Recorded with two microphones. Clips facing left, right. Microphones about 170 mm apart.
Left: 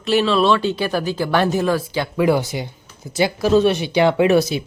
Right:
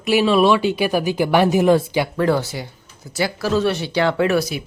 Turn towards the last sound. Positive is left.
turn(degrees=25)  # may be behind; listen again after turning